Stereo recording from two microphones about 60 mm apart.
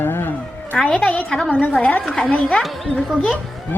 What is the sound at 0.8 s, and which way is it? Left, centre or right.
A woman's voice, left.